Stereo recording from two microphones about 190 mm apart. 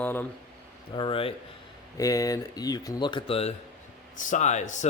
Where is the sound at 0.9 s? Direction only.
25° left (ahead or behind).